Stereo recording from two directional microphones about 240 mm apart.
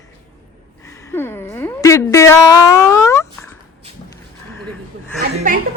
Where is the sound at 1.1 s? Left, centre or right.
Centre.